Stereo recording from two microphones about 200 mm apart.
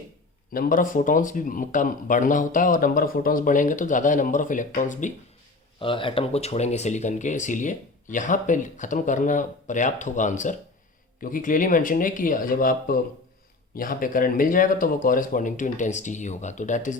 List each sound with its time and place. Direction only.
0.5 s speech: 45° left (ahead or behind)
5.8 s speech: 25° left (ahead or behind)